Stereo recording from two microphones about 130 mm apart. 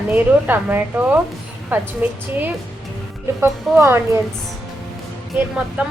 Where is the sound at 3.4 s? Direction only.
20° right (ahead or behind).